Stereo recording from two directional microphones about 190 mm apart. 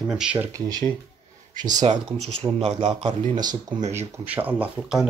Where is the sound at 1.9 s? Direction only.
30° right (ahead or behind).